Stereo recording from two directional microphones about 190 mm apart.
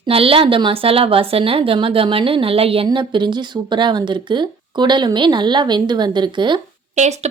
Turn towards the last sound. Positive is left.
turn(degrees=-35)  # may be behind; listen again after turning